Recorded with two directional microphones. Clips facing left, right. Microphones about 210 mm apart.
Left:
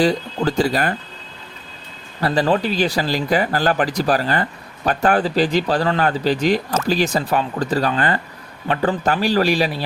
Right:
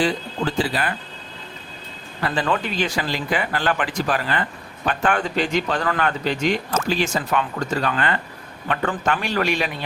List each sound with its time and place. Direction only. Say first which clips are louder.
0.0 s speech: left 4 dB; 40° left (ahead or behind)
2.2 s speech: left 5 dB; 35° left (ahead or behind)